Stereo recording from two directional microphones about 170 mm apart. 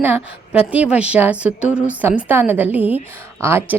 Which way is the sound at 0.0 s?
10° right (ahead or behind).